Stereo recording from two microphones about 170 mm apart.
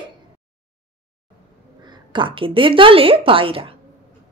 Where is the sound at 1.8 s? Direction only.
25° right (ahead or behind).